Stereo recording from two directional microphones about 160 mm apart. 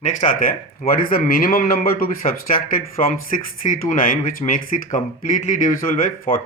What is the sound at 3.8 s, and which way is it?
Speech, 60° left (ahead or behind).